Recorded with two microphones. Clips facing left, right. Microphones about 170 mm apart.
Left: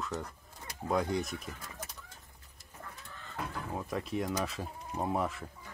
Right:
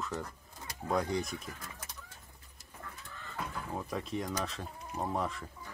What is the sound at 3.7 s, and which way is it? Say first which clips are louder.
Speech: left 2 dB; centre (ahead or behind).